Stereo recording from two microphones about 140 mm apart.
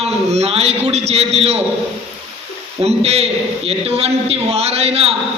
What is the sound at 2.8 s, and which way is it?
A man's voice, 50° right (ahead or behind).